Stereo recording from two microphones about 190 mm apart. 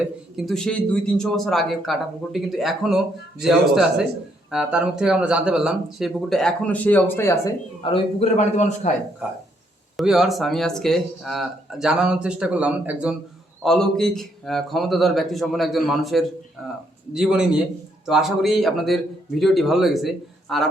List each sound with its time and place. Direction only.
0.3 s speech: centre (ahead or behind)
7.8 s a man's voice: 30° left (ahead or behind)
9.2 s speech: 5° right (ahead or behind)